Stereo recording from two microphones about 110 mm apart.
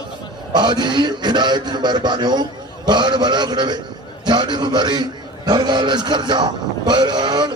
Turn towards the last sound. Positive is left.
turn(degrees=-40)  # may be behind; listen again after turning